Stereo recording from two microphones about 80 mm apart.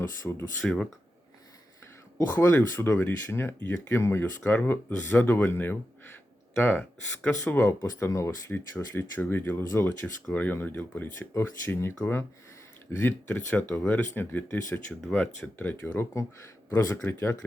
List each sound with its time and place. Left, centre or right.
0.2 s speech: left
0.6 s speech: centre
2.1 s speech: left
7.6 s speech: left
8.4 s speech: left
16.1 s speech: left